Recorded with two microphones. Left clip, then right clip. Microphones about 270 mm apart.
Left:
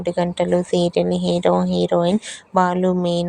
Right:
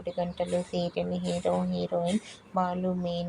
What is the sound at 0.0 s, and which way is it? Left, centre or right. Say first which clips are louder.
Speech: left 11 dB; left.